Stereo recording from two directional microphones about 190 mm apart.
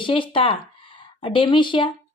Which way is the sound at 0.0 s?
25° left (ahead or behind).